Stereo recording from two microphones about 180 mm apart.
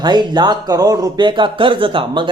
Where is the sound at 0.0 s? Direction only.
25° right (ahead or behind).